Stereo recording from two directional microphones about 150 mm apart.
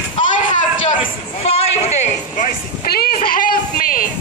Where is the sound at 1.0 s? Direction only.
40° left (ahead or behind); by 4.0 s 70° left (ahead or behind).